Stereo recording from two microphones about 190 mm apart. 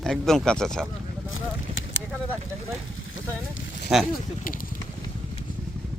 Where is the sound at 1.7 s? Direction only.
30° right (ahead or behind).